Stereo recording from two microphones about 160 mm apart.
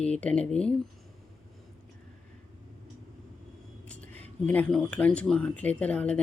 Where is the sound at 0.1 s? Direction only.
10° left (ahead or behind).